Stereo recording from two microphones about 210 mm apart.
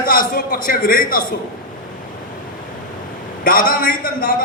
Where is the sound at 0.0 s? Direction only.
45° left (ahead or behind).